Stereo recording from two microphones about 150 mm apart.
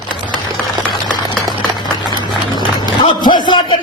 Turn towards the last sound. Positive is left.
turn(degrees=30)  # may be behind; listen again after turning